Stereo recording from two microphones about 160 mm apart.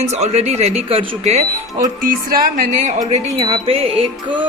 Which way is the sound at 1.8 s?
60° right (ahead or behind).